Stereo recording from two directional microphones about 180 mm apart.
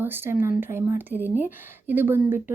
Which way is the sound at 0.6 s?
10° right (ahead or behind).